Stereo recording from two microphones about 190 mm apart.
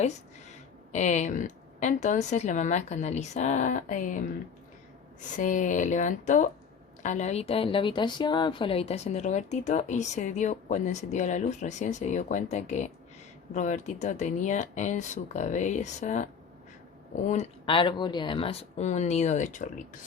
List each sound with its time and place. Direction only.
0.9 s a woman's voice: 40° left (ahead or behind)
5.4 s a woman's voice: 40° left (ahead or behind)